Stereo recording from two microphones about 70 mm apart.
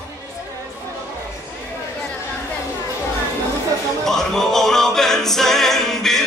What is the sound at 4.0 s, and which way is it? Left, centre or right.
A capella, centre.